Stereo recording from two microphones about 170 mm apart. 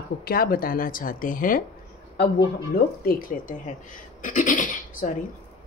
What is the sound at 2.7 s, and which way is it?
Speech, 60° left (ahead or behind).